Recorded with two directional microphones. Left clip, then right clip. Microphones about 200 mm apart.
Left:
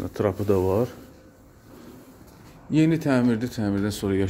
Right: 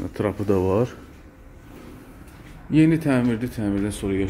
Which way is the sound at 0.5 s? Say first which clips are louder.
Right 4 dB; 5° right (ahead or behind).